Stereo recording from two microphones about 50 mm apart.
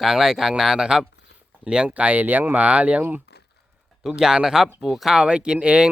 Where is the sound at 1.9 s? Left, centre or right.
Right.